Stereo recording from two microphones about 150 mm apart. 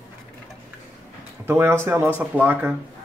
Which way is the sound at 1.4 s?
15° right (ahead or behind).